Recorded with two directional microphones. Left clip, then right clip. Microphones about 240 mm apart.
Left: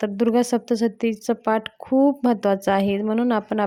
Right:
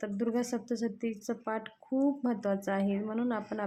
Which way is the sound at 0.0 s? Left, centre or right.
Left.